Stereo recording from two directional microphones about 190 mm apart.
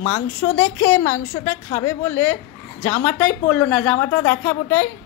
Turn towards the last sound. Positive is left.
turn(degrees=10)  # may be behind; listen again after turning